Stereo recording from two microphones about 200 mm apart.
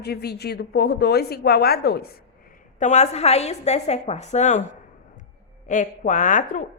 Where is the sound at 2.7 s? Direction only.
35° left (ahead or behind).